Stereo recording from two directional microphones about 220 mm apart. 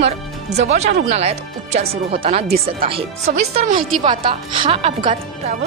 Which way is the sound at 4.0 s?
25° right (ahead or behind).